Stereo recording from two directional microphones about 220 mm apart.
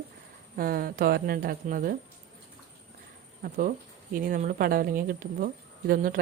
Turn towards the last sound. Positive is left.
turn(degrees=-40)  # may be behind; listen again after turning